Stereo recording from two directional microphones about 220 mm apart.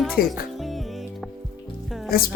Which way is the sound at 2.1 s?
45° left (ahead or behind).